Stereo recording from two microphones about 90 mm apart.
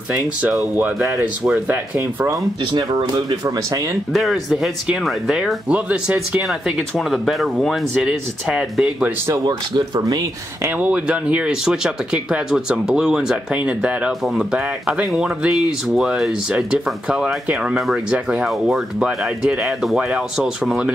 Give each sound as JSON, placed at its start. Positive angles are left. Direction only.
{"t": 1.4, "sound": "speech", "side_deg": -15}
{"t": 2.8, "sound": "speech", "side_deg": -40}
{"t": 4.1, "sound": "speech", "side_deg": 0}
{"t": 9.3, "sound": "speech", "side_deg": -45}
{"t": 10.7, "sound": "speech", "side_deg": -15}
{"t": 20.0, "sound": "speech", "side_deg": -10}